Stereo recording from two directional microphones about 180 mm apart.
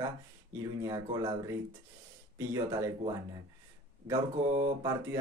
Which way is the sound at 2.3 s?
15° right (ahead or behind).